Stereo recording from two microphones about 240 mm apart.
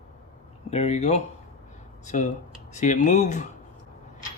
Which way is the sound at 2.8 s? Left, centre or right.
Left.